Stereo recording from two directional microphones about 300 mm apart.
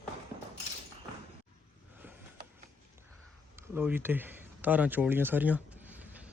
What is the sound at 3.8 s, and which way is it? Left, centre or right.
Speech, centre.